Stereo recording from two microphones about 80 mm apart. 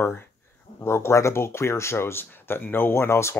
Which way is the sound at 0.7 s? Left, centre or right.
Left.